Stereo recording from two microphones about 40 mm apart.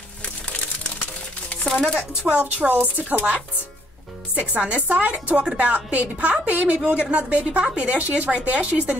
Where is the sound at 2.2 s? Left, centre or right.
Right.